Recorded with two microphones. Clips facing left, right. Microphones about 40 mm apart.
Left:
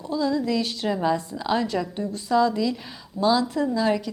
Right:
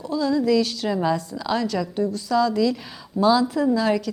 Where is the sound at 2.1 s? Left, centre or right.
Left.